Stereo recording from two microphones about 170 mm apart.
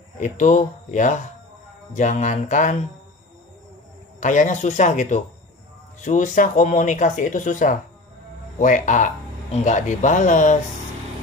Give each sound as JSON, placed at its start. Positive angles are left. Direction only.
{"t": 0.2, "sound": "speech", "side_deg": 45}
{"t": 4.2, "sound": "speech", "side_deg": 45}